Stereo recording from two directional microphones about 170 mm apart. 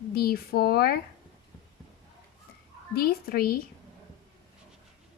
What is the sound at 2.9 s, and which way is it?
Speech, 65° left (ahead or behind).